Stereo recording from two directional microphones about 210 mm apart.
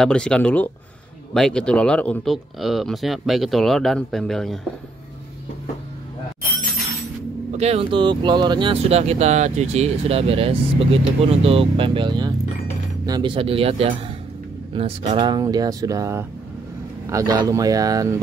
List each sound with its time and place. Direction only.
0.0 s speech: 5° left (ahead or behind)
7.5 s speech: 30° right (ahead or behind)